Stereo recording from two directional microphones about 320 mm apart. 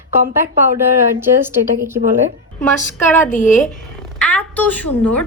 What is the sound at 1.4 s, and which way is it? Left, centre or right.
Speech, centre.